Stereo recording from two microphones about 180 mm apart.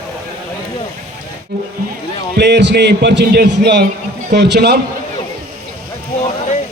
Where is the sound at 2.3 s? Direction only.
70° right (ahead or behind).